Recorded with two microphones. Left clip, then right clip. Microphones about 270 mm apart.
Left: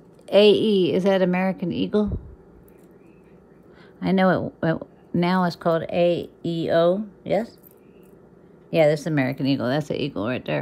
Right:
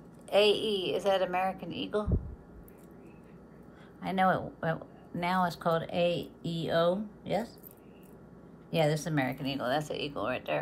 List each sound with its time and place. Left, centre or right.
0.3 s speech: left
4.0 s speech: left
8.6 s speech: left